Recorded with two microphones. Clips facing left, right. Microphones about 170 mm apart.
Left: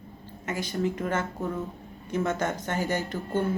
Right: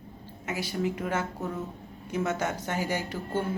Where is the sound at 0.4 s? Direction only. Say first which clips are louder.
Left 1 dB; 10° right (ahead or behind).